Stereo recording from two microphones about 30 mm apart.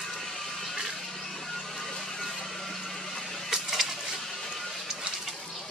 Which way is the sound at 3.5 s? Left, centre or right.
Centre.